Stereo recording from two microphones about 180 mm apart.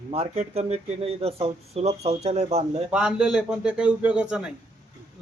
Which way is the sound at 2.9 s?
5° right (ahead or behind).